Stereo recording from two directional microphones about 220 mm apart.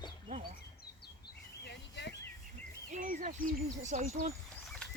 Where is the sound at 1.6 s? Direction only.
50° left (ahead or behind).